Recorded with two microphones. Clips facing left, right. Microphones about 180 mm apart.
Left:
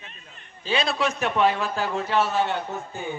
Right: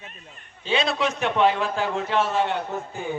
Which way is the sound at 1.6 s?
5° left (ahead or behind).